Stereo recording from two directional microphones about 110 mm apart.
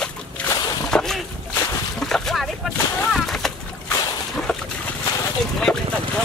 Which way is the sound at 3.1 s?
Centre (ahead or behind).